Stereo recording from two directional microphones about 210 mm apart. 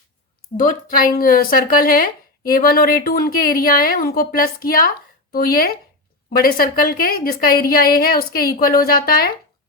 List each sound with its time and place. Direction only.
0.5 s speech: 40° left (ahead or behind)